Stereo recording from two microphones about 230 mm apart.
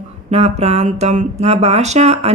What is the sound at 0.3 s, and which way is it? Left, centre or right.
Speech, right.